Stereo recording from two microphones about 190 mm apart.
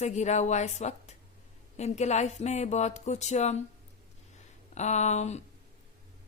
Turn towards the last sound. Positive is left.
turn(degrees=35)  # may be behind; listen again after turning